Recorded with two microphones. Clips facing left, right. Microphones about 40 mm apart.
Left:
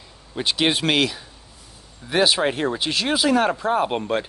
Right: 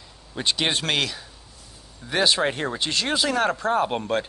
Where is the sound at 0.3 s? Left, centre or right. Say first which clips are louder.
Left 3 dB; centre.